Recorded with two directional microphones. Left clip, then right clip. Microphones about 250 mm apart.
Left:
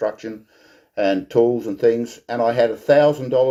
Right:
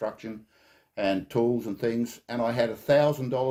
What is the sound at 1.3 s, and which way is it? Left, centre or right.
Speech, right.